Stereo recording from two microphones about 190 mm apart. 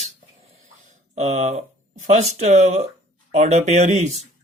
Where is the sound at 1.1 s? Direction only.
35° right (ahead or behind).